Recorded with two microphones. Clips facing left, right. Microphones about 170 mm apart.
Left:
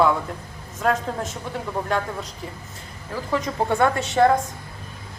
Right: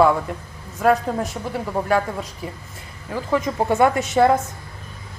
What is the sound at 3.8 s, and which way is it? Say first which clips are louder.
Speech: right 5 dB; 20° right (ahead or behind).